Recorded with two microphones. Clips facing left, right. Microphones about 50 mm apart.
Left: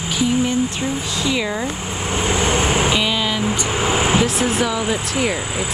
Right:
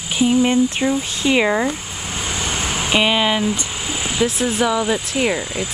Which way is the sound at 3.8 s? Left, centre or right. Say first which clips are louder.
Left 10 dB; left.